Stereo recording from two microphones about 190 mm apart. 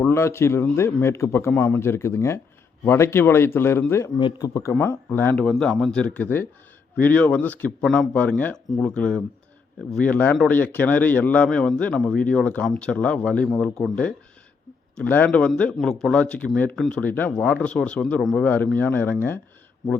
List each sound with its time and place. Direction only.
0.0 s speech: 15° left (ahead or behind)
4.2 s speech: 25° left (ahead or behind)